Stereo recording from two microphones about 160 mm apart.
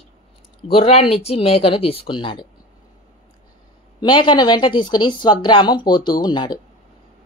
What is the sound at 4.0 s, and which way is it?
Speech, 30° left (ahead or behind).